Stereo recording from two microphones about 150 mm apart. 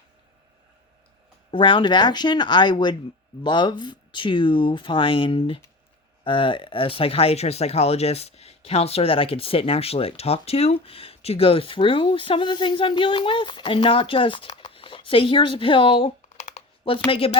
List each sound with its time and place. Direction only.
1.5 s speech: 35° left (ahead or behind)
16.5 s typing: 40° left (ahead or behind)
17.1 s speech: 40° left (ahead or behind)